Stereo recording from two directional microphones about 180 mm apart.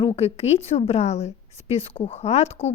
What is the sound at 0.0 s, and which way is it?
Speech, 35° left (ahead or behind).